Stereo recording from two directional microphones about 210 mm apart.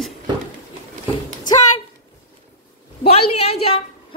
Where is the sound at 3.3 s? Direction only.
30° left (ahead or behind).